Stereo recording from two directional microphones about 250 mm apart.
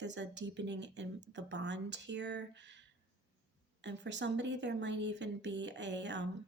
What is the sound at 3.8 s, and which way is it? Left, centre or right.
Speech, right.